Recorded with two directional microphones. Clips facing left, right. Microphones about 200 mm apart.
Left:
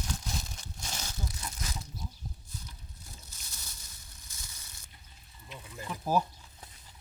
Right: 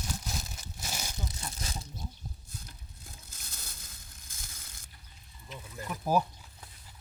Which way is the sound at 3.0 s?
55° right (ahead or behind).